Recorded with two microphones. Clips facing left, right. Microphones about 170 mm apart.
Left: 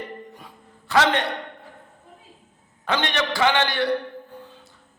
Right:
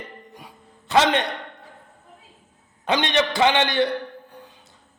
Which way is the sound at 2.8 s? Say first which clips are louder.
Right 3 dB; 20° right (ahead or behind).